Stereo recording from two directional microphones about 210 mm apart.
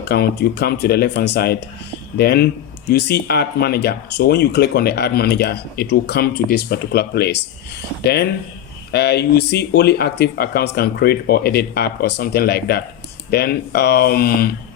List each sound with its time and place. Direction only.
0.0 s speech: 50° left (ahead or behind)